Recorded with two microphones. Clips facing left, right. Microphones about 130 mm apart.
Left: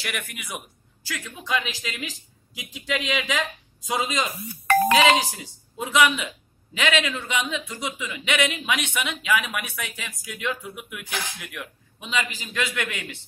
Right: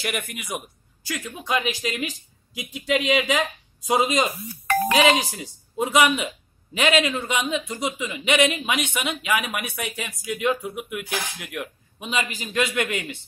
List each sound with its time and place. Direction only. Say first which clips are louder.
0.0 s speech: right 4 dB; 45° right (ahead or behind)
4.6 s speech: left 1 dB; 75° left (ahead or behind)
5.4 s speech: right 7 dB; 50° right (ahead or behind)